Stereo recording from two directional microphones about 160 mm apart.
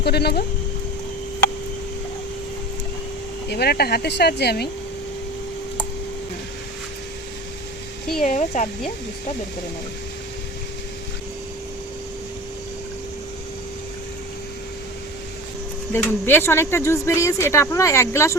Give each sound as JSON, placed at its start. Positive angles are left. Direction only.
{"t": 0.0, "sound": "speech", "side_deg": 90}
{"t": 3.5, "sound": "speech", "side_deg": 85}
{"t": 8.2, "sound": "speech", "side_deg": 50}
{"t": 15.9, "sound": "speech", "side_deg": 15}